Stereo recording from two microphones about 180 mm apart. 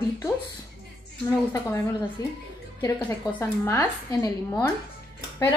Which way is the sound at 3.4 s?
15° left (ahead or behind).